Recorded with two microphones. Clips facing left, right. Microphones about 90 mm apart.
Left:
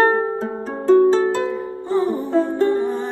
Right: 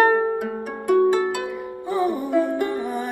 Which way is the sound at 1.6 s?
15° right (ahead or behind).